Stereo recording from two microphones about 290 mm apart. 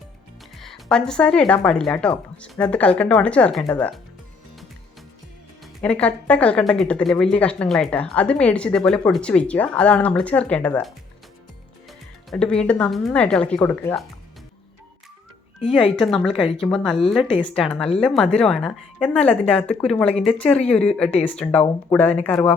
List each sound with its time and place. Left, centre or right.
0.6 s speech: centre
5.8 s speech: centre
16.0 s speech: centre
16.2 s speech: centre
16.6 s speech: centre